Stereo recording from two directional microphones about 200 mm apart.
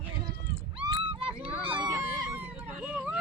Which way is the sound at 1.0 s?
25° right (ahead or behind).